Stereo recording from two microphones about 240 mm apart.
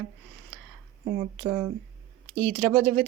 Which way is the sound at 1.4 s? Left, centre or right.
Centre.